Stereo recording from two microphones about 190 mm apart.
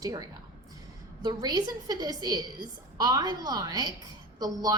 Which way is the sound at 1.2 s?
20° right (ahead or behind).